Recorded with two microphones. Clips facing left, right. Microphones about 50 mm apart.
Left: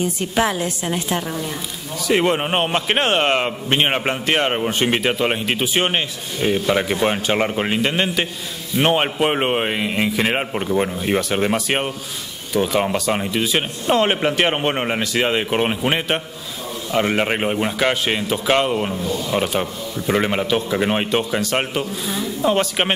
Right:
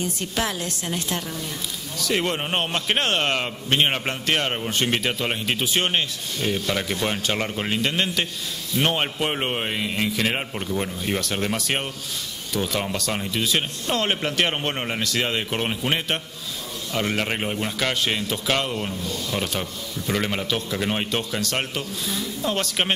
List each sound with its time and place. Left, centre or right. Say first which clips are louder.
0.0 s a man's voice: left 7 dB; centre